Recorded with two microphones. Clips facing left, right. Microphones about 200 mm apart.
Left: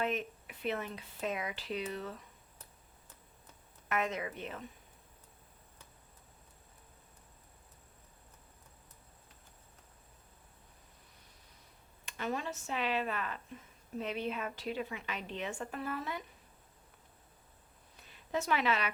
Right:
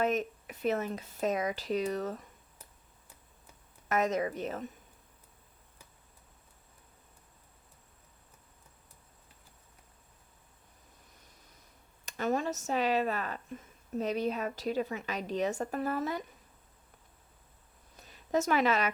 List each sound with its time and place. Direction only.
0.0 s speech: 40° right (ahead or behind)
3.8 s a woman's voice: 40° right (ahead or behind)
12.0 s a woman's voice: 45° right (ahead or behind)
17.9 s a sound: 40° right (ahead or behind)